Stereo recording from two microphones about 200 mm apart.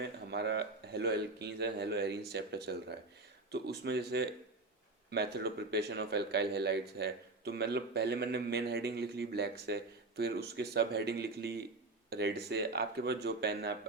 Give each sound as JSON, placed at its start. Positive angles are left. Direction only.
{"t": 0.0, "sound": "speech", "side_deg": -55}